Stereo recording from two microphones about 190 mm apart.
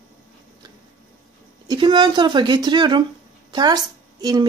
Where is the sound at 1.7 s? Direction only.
25° right (ahead or behind).